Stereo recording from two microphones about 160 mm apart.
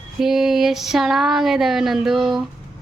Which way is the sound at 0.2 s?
5° right (ahead or behind).